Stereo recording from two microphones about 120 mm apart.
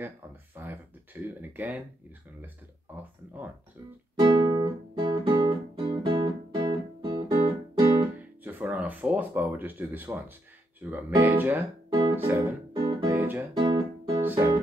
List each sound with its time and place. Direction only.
0.6 s a sound: 20° right (ahead or behind)
1.4 s speech: 15° right (ahead or behind)
4.2 s music: 40° right (ahead or behind)
8.2 s music: 15° right (ahead or behind)
10.8 s speech: 15° right (ahead or behind)
11.9 s music: 35° right (ahead or behind)
12.2 s speech: 15° right (ahead or behind)
13.1 s music: 15° right (ahead or behind)
13.6 s guitar: 35° right (ahead or behind)
14.2 s music: 15° right (ahead or behind)